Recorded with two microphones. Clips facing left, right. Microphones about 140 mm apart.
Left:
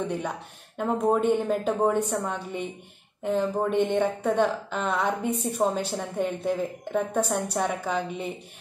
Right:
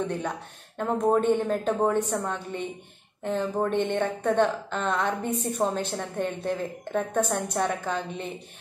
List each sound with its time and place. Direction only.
0.0 s a woman's voice: 10° left (ahead or behind)